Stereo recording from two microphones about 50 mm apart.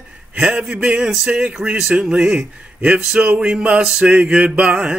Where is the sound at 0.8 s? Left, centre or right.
Centre.